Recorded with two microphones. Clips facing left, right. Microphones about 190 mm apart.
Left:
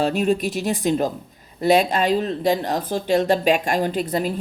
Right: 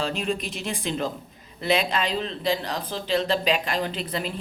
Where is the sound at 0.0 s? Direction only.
45° left (ahead or behind).